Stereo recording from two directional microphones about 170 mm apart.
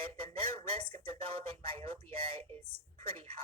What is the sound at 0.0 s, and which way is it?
Speech, 35° right (ahead or behind).